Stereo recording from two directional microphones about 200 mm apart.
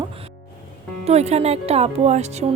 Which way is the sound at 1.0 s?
30° right (ahead or behind).